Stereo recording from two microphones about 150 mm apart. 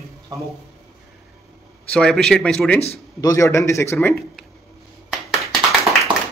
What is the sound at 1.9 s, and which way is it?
Speech, 5° left (ahead or behind).